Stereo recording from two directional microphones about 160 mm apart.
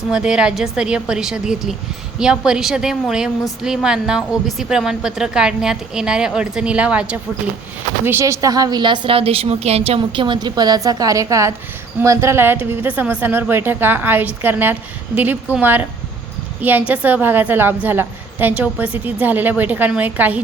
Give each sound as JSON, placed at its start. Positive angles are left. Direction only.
{"t": 0.1, "sound": "a woman's voice", "side_deg": -5}